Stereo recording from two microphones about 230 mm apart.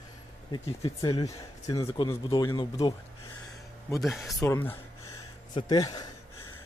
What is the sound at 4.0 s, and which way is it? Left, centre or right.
Speech, centre.